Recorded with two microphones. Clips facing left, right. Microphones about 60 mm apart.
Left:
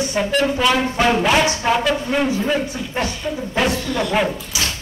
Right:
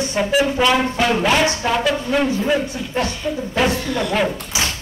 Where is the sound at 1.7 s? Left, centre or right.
Centre.